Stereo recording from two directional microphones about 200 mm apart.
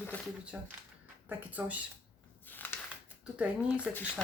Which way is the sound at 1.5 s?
10° right (ahead or behind).